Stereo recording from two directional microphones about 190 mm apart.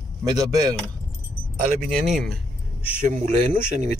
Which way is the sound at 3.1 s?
40° right (ahead or behind).